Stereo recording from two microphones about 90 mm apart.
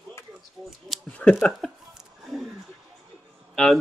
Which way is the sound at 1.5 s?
Centre (ahead or behind).